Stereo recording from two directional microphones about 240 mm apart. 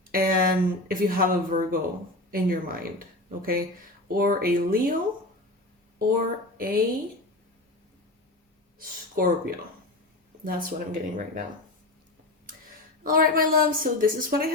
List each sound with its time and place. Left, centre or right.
0.1 s speech: right
6.0 s speech: right
8.8 s speech: right
13.0 s speech: right